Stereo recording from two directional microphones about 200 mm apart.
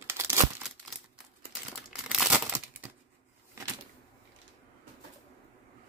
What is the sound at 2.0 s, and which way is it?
Crumpling, 5° right (ahead or behind).